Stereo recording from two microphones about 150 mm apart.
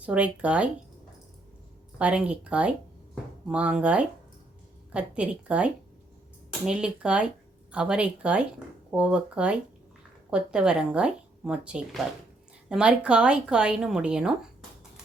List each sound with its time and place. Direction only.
0.0 s speech: 10° right (ahead or behind)
2.0 s speech: 10° right (ahead or behind)